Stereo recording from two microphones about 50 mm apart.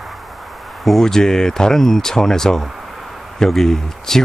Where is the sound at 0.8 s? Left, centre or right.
Centre.